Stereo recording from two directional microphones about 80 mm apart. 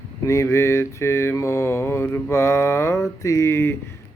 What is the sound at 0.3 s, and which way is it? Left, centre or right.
Mantra, left.